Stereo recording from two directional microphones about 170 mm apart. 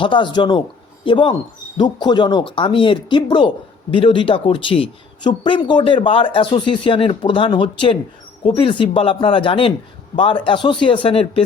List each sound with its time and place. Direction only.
0.0 s speech: 30° left (ahead or behind)